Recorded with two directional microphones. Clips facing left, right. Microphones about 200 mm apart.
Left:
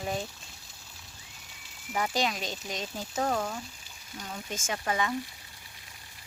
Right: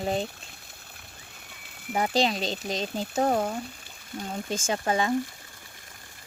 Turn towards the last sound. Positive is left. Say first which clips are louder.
# right 5 dB
turn(degrees=-30)  # may be behind; listen again after turning